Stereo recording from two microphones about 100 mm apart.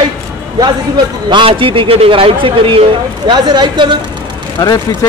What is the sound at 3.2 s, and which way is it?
Speech, 45° right (ahead or behind).